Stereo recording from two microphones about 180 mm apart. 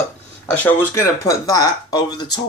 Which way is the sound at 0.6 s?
15° left (ahead or behind).